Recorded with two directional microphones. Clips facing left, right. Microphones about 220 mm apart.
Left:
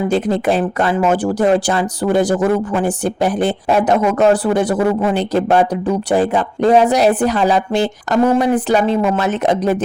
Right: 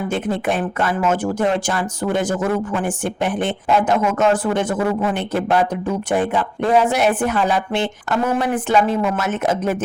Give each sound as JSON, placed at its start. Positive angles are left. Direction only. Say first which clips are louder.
{"t": 0.1, "sound": "speech", "louder": "left 4 dB", "side_deg": 35}